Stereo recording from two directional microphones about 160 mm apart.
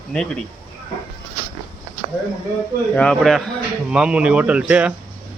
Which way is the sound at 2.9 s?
5° left (ahead or behind).